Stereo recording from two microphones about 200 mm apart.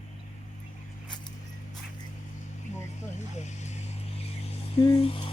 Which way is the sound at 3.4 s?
35° left (ahead or behind).